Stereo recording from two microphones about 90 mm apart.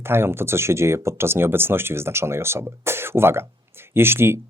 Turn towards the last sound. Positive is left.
turn(degrees=-25)  # may be behind; listen again after turning